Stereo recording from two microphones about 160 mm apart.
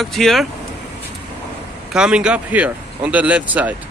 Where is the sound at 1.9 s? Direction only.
5° right (ahead or behind).